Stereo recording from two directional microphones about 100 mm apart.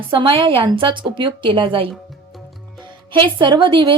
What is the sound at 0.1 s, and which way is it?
A woman's voice, 60° right (ahead or behind).